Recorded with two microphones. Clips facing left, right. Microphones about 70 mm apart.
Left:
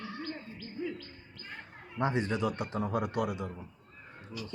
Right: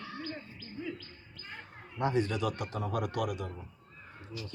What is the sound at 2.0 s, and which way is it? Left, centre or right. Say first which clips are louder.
A man's voice: even; left.